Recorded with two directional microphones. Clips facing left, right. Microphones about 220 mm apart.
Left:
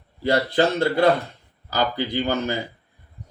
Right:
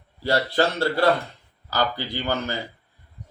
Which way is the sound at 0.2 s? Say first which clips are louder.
Left 2 dB; 20° left (ahead or behind).